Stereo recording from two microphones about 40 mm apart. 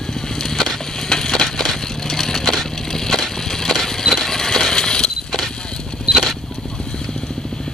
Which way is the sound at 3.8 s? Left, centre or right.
Centre.